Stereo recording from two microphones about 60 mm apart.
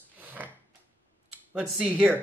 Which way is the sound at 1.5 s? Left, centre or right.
Centre.